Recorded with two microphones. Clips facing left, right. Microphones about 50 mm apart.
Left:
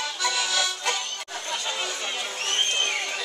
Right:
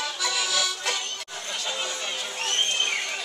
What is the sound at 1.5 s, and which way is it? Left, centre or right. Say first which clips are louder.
Chatter: left 1 dB; centre.